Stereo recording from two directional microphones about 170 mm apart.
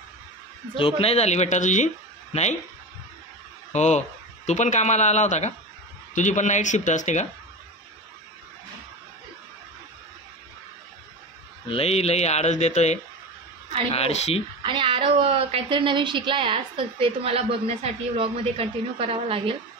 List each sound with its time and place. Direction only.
1.0 s speech: 40° left (ahead or behind)
3.7 s speech: 40° left (ahead or behind)
11.7 s speech: 35° left (ahead or behind)
14.6 s a woman's voice: 30° right (ahead or behind)